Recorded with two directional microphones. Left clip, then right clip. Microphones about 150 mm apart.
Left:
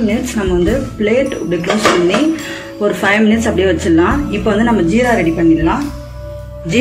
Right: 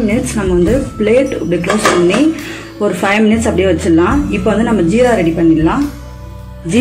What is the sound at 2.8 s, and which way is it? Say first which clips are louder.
A woman's voice: even; 35° right (ahead or behind).